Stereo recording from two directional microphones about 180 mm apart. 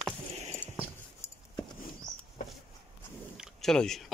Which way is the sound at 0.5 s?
10° left (ahead or behind).